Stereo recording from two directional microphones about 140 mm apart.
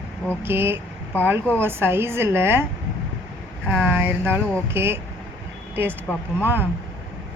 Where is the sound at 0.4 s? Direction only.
15° right (ahead or behind).